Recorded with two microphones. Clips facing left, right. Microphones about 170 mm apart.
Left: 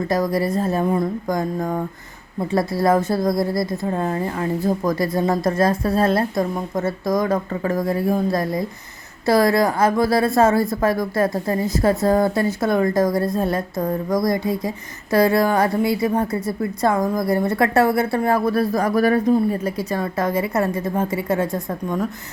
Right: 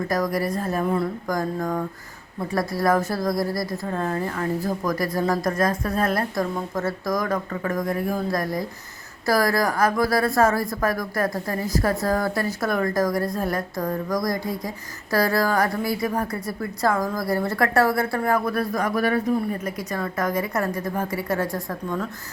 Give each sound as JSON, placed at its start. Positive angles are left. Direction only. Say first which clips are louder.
{"t": 0.1, "sound": "a woman's voice", "louder": "left 5 dB", "side_deg": 25}